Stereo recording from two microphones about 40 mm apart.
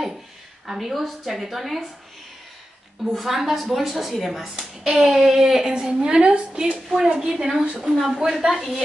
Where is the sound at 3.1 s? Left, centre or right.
Centre.